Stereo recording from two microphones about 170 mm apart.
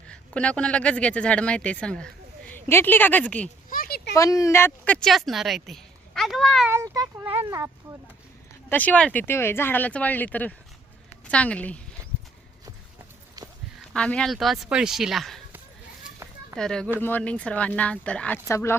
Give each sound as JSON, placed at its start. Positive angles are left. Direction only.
{"t": 0.1, "sound": "speech", "side_deg": 5}
{"t": 3.7, "sound": "a sound", "side_deg": 60}
{"t": 4.1, "sound": "a woman's voice", "side_deg": 20}
{"t": 6.7, "sound": "speech", "side_deg": -15}
{"t": 8.7, "sound": "speech", "side_deg": 10}
{"t": 13.9, "sound": "a woman's voice", "side_deg": 5}
{"t": 16.6, "sound": "a woman's voice", "side_deg": 5}